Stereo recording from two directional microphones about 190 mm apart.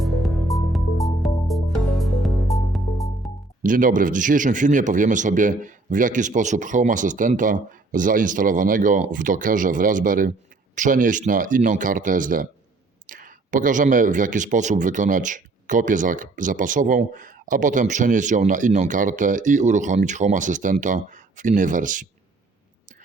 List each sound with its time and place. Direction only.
0.0 s music: centre (ahead or behind)
3.6 s a man's voice: 45° right (ahead or behind)